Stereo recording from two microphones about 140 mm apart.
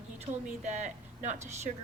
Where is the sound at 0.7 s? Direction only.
55° right (ahead or behind).